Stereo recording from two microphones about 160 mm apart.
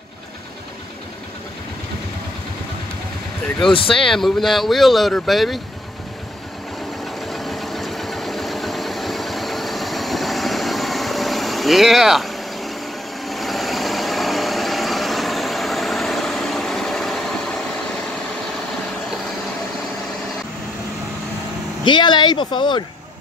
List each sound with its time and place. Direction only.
3.9 s speech: 5° left (ahead or behind)
7.2 s engine: centre (ahead or behind)
13.2 s vehicle: centre (ahead or behind)
21.8 s speech: 30° left (ahead or behind)